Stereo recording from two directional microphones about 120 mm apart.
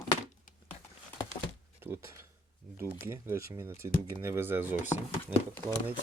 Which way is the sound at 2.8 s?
20° right (ahead or behind).